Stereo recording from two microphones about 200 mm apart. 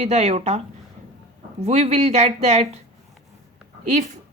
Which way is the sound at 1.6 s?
30° right (ahead or behind).